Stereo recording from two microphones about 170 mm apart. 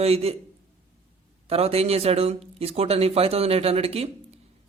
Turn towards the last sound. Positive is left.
turn(degrees=-35)  # may be behind; listen again after turning